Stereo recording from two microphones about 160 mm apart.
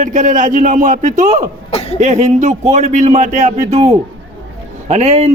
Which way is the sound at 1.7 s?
40° left (ahead or behind).